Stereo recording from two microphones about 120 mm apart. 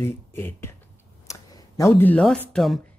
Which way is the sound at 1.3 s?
25° left (ahead or behind).